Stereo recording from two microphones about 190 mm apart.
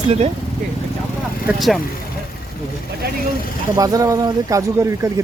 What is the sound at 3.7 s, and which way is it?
Speech, 20° right (ahead or behind).